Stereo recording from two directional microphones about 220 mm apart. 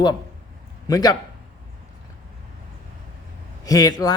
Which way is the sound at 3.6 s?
15° left (ahead or behind).